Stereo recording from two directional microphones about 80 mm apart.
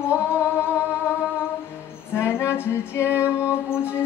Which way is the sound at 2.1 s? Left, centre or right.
Left.